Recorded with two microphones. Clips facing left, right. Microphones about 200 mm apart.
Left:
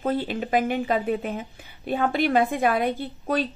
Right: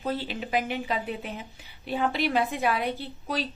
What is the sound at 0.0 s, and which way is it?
Speech, 50° left (ahead or behind).